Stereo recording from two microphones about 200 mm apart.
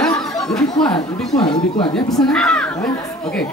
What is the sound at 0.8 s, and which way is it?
Speech, 5° left (ahead or behind).